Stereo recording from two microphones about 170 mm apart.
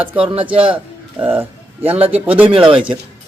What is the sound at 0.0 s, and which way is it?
Speech, 10° right (ahead or behind).